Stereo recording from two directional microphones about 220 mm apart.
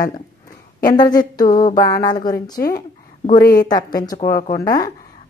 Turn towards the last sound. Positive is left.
turn(degrees=15)  # may be behind; listen again after turning